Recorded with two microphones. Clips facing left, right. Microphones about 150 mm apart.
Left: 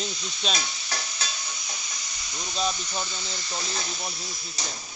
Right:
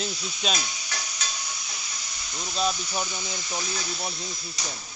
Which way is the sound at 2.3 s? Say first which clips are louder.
Right 2 dB; centre (ahead or behind).